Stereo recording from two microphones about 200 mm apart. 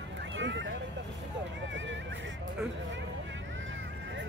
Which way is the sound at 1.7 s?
65° right (ahead or behind).